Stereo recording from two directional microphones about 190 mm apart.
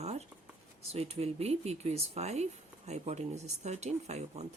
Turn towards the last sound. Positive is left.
turn(degrees=-35)  # may be behind; listen again after turning